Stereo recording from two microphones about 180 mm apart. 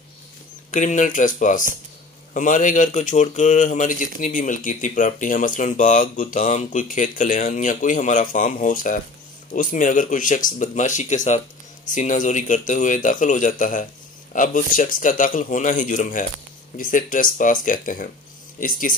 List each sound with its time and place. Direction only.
0.7 s speech: 45° left (ahead or behind)